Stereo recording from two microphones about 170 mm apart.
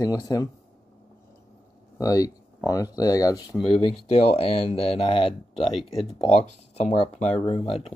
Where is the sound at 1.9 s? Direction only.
20° left (ahead or behind).